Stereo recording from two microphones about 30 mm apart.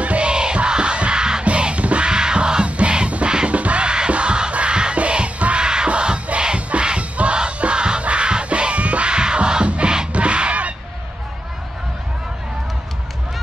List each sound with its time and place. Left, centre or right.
0.0 s music: right
0.3 s music: right
1.4 s music: right
2.0 s music: right
2.6 s music: right
3.8 s music: right
5.9 s crowd: right
7.0 s music: right
7.3 s music: right
9.1 s music: right
10.1 s honk: right